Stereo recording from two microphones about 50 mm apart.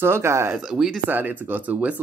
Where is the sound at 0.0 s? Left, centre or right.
Right.